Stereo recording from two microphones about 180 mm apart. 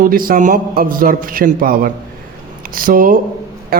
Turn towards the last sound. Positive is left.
turn(degrees=-55)  # may be behind; listen again after turning